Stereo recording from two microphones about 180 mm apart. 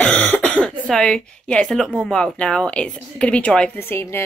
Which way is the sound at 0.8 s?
5° left (ahead or behind).